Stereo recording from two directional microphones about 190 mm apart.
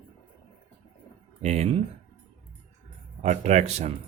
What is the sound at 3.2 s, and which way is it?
Speech, 35° right (ahead or behind).